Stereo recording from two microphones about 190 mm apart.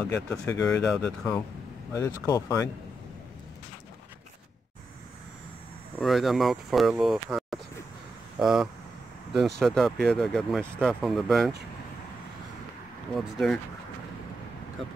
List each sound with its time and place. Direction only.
0.0 s speech: 10° left (ahead or behind)
2.0 s speech: 15° left (ahead or behind)
5.9 s speech: centre (ahead or behind)
13.1 s speech: centre (ahead or behind)